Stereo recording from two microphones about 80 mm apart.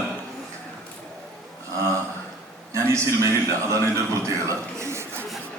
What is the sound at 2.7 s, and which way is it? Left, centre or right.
A man's voice, right.